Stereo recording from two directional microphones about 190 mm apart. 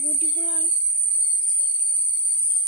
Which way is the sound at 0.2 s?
55° left (ahead or behind).